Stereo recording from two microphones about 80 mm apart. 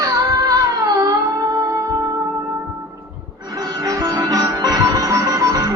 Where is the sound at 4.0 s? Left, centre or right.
Right.